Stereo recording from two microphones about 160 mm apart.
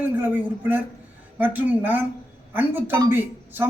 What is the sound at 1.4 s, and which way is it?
A man's voice, 10° right (ahead or behind).